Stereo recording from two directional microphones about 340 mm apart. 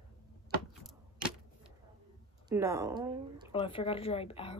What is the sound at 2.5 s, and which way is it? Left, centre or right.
Speech, centre.